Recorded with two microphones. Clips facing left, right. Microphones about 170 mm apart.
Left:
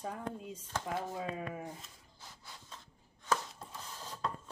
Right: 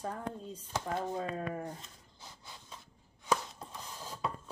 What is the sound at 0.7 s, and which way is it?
Speech, 20° right (ahead or behind).